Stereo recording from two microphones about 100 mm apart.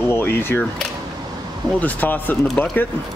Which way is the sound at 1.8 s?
15° left (ahead or behind).